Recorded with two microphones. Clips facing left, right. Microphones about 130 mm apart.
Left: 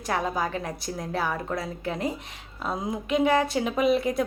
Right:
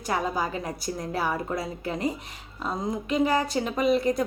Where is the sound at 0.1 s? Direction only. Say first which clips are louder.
Even; centre (ahead or behind).